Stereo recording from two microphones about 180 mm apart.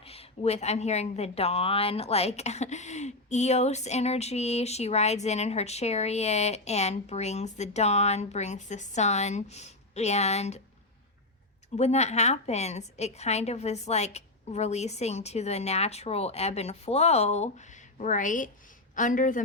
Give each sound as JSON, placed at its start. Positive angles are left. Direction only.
{"t": 0.0, "sound": "a woman's voice", "side_deg": 35}
{"t": 11.8, "sound": "a woman's voice", "side_deg": 40}